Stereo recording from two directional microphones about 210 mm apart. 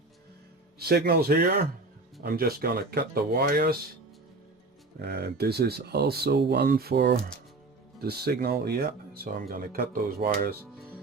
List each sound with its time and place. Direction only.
0.8 s speech: 50° right (ahead or behind)
4.9 s speech: 50° right (ahead or behind)